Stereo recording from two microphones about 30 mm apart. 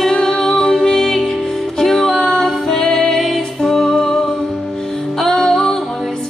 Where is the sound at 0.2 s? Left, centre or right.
Centre.